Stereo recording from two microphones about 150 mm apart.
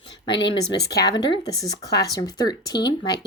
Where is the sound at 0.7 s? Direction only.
25° left (ahead or behind).